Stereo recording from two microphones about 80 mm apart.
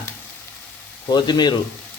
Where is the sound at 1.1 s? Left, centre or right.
Left.